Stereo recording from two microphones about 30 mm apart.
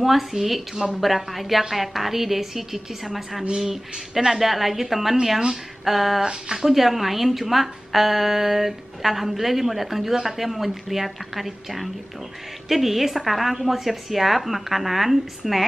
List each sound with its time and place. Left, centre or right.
0.0 s a woman's voice: centre
6.2 s speech: centre
6.7 s a woman's voice: centre